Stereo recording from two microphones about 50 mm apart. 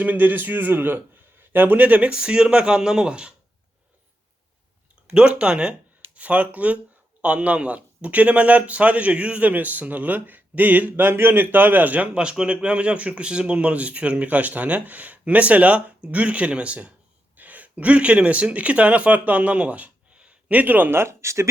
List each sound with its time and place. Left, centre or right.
0.0 s a man's voice: right
2.1 s speech: centre
5.0 s a man's voice: right
12.1 s a man's voice: centre; by 20.9 s right
20.9 s speech: right